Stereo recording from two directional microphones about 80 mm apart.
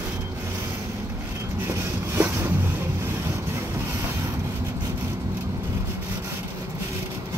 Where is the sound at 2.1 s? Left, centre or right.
Right.